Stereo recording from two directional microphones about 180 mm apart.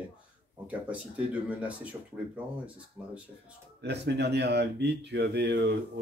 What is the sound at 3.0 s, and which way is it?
Speech, 5° right (ahead or behind).